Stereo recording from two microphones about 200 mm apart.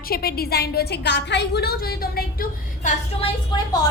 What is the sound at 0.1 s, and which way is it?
A woman's voice, 50° left (ahead or behind).